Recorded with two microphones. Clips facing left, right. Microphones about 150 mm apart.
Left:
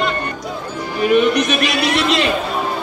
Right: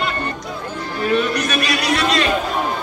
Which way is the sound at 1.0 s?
20° left (ahead or behind).